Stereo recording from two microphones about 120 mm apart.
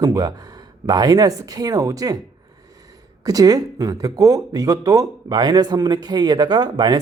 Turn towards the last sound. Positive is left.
turn(degrees=-35)  # may be behind; listen again after turning